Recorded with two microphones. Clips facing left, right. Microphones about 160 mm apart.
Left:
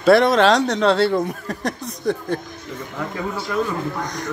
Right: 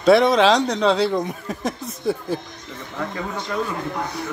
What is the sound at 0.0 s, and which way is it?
Speech, centre (ahead or behind).